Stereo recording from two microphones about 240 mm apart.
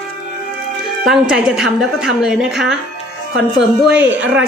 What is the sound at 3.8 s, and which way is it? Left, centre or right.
Speech, centre.